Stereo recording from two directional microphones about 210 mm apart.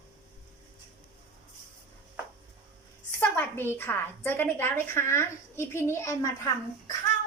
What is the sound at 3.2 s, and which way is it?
A woman's voice, 10° left (ahead or behind).